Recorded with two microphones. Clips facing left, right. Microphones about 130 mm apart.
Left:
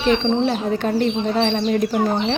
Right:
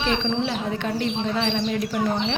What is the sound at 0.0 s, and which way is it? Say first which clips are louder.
A woman's voice: left 6 dB; 40° left (ahead or behind).